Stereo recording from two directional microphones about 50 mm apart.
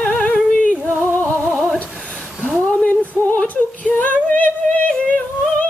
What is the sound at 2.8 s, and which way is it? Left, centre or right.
Female singing, left.